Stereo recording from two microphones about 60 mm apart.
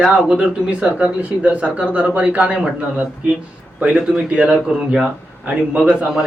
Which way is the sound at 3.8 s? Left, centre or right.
Centre.